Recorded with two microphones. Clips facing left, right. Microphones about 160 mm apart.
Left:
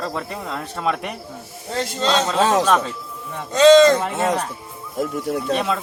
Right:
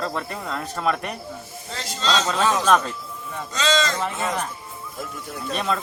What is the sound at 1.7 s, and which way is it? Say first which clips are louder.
Speech: left 4 dB; 60° left (ahead or behind).